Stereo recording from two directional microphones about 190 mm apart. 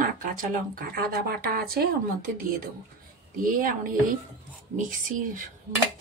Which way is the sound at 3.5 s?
45° right (ahead or behind).